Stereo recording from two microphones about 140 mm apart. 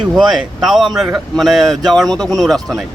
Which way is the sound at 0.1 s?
Centre (ahead or behind).